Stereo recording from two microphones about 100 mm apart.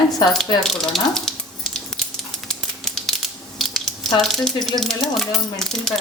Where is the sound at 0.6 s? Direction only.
5° left (ahead or behind).